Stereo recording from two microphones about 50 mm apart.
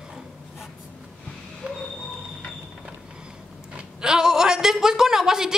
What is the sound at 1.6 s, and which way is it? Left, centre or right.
Train, right.